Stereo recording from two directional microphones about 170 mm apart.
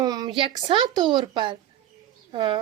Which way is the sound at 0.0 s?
25° right (ahead or behind).